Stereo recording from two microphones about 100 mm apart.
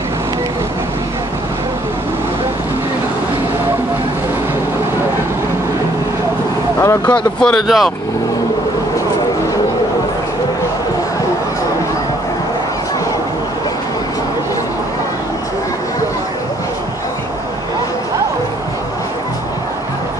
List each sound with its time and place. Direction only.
6.8 s vehicle: 30° left (ahead or behind)
7.4 s speech: centre (ahead or behind)